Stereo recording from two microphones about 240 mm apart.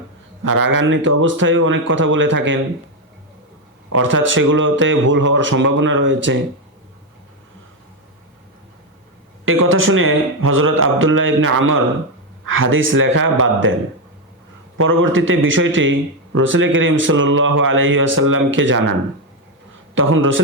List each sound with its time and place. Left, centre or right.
0.5 s a man's voice: right
3.8 s a man's voice: right
9.5 s a man's voice: right
14.8 s a man's voice: right
20.0 s a man's voice: right